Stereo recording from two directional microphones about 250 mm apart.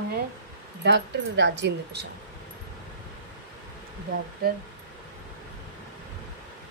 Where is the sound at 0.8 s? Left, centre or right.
Right.